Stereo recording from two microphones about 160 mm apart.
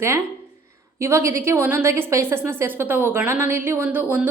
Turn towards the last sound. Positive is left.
turn(degrees=-10)  # may be behind; listen again after turning